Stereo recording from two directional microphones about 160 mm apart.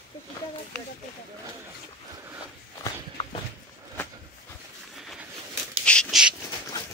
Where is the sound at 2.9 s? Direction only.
30° left (ahead or behind).